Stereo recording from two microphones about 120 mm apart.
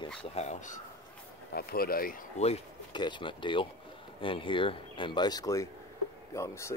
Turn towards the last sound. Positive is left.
turn(degrees=25)  # may be behind; listen again after turning